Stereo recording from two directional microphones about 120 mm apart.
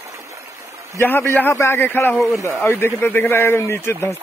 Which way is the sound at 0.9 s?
20° left (ahead or behind).